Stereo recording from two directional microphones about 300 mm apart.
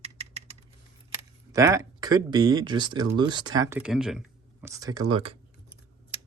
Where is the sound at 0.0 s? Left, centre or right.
Right.